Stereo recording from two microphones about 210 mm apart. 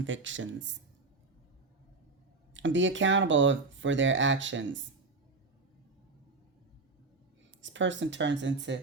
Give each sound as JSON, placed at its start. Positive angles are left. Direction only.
{"t": 0.0, "sound": "speech", "side_deg": -60}
{"t": 2.6, "sound": "speech", "side_deg": -60}
{"t": 7.6, "sound": "speech", "side_deg": -60}